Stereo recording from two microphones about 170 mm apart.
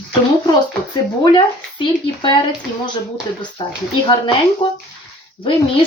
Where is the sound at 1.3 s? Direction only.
30° left (ahead or behind).